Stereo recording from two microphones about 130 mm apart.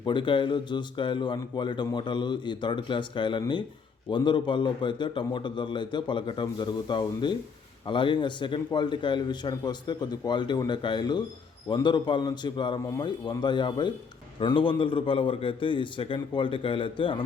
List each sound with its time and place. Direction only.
0.0 s a man's voice: 40° left (ahead or behind)